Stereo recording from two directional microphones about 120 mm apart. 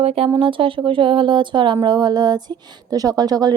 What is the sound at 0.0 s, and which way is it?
Speech, 55° right (ahead or behind).